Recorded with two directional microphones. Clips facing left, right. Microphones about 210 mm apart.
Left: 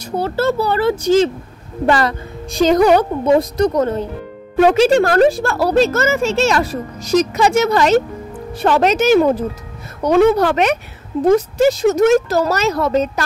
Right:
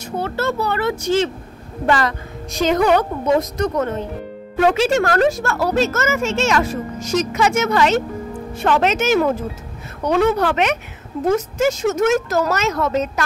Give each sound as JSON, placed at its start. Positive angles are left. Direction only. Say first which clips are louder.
{"t": 0.2, "sound": "speech", "louder": "left 4 dB", "side_deg": 30}